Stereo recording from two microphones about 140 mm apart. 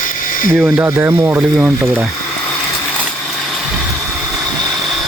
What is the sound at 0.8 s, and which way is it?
Speech, 15° right (ahead or behind).